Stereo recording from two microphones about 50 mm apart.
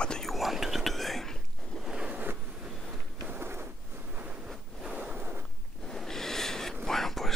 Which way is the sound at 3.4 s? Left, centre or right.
Right.